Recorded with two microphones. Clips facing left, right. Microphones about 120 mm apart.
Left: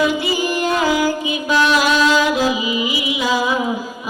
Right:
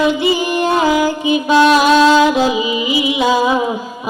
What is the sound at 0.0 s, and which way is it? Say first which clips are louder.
Music: right 4 dB; 20° right (ahead or behind).